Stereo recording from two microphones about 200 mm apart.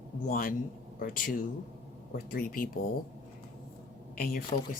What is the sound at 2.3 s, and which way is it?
Speech, 45° left (ahead or behind).